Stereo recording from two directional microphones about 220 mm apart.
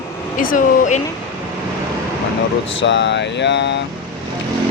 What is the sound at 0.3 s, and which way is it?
Speech, 35° left (ahead or behind).